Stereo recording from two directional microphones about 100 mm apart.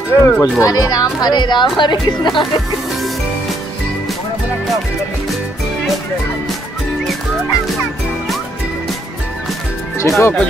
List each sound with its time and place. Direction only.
0.2 s speech: 35° left (ahead or behind)
9.9 s speech: 30° left (ahead or behind)